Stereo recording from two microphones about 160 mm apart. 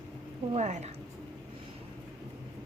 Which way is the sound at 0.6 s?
45° right (ahead or behind).